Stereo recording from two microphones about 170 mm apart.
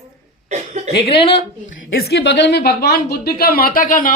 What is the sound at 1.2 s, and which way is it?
Speech, 35° left (ahead or behind).